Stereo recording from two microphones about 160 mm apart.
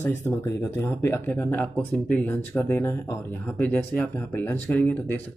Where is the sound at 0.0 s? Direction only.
15° left (ahead or behind).